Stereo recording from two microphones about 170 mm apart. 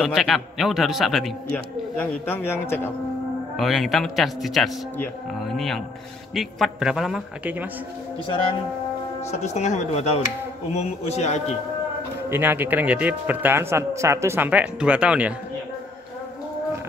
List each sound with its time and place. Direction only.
0.0 s a man's voice: centre (ahead or behind)
2.0 s a man's voice: 10° left (ahead or behind)
3.5 s a man's voice: centre (ahead or behind)
9.3 s speech: 40° left (ahead or behind)
12.3 s speech: 10° right (ahead or behind)